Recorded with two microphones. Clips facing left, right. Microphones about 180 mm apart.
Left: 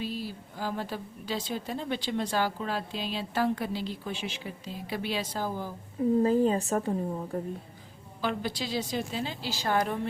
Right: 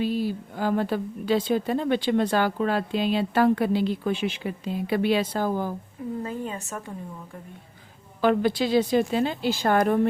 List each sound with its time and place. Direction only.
0.0 s a woman's voice: 55° right (ahead or behind)
6.2 s a woman's voice: 35° left (ahead or behind)
8.2 s a woman's voice: 55° right (ahead or behind)